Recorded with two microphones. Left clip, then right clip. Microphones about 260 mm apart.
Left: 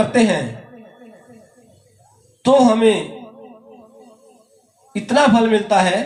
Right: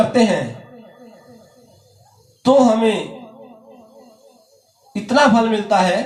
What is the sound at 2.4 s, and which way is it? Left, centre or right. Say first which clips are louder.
Speech: even; left.